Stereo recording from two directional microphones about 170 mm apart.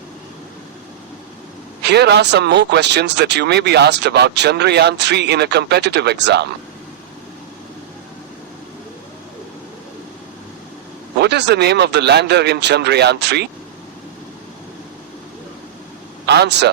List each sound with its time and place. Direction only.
1.8 s speech: 80° right
11.2 s speech: 85° right
16.2 s a man's voice: 80° right